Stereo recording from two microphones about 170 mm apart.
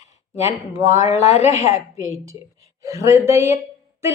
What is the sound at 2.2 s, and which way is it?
A woman's voice, 20° right (ahead or behind).